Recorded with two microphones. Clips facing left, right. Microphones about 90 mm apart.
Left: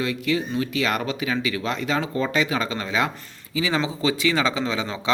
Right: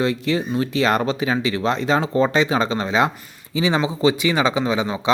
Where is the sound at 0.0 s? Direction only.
35° right (ahead or behind).